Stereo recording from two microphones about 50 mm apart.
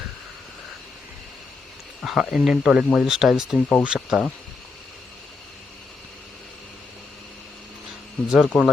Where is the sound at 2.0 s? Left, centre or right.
Centre.